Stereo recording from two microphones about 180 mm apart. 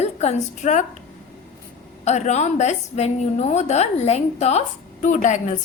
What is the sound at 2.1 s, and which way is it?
A woman's voice, 40° left (ahead or behind).